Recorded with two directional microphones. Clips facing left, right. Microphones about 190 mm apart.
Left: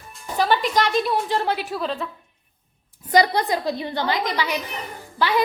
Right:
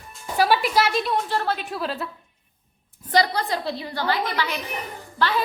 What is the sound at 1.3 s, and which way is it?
Speech, 15° left (ahead or behind).